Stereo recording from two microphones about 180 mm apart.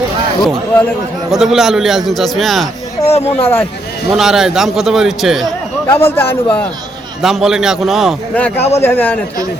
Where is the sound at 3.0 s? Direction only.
35° left (ahead or behind).